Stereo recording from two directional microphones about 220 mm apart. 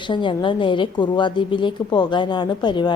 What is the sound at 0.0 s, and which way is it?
A woman's voice, 20° left (ahead or behind).